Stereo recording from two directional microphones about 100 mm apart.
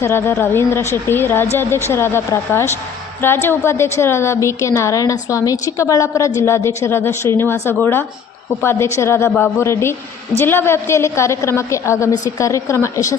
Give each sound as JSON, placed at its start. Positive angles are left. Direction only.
{"t": 0.0, "sound": "a woman's voice", "side_deg": 25}